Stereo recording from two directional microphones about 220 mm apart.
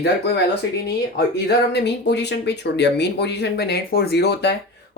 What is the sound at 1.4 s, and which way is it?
Speech, 50° left (ahead or behind).